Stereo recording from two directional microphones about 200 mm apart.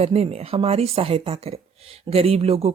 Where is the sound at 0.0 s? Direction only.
30° right (ahead or behind).